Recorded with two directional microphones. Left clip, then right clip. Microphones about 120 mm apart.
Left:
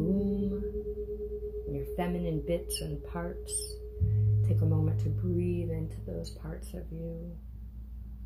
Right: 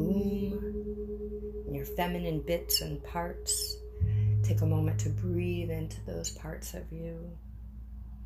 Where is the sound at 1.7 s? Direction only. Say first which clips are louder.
Right 2 dB; 25° left (ahead or behind).